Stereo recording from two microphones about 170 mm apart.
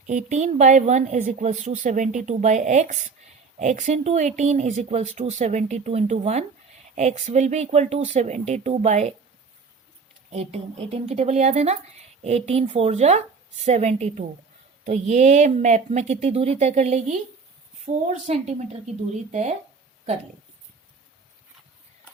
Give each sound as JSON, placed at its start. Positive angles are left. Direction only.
{"t": 0.1, "sound": "a woman's voice", "side_deg": -45}
{"t": 10.3, "sound": "a woman's voice", "side_deg": -35}